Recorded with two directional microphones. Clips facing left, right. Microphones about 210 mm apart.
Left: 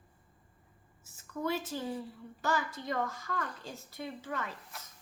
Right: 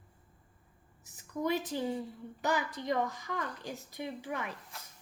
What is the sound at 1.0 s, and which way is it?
A woman's voice, 15° right (ahead or behind).